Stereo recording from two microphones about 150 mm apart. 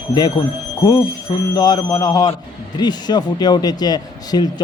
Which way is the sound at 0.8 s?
25° left (ahead or behind).